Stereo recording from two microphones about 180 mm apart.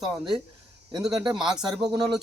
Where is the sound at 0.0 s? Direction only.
5° right (ahead or behind).